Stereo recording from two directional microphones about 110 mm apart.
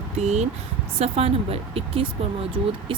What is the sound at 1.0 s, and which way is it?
A woman's voice, 65° right (ahead or behind).